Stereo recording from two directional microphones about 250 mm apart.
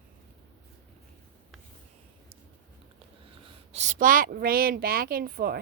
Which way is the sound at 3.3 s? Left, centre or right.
Right.